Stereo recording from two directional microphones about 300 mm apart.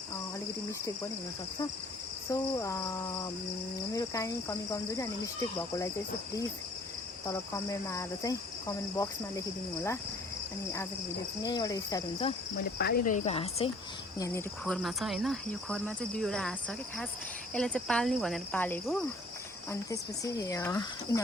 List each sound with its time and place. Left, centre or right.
2.3 s speech: centre
3.9 s speech: centre
7.3 s speech: centre
11.4 s speech: centre
12.5 s speech: left
14.2 s cricket: centre
19.7 s speech: centre